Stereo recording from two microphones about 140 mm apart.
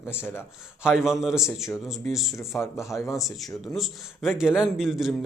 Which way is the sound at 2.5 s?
20° left (ahead or behind).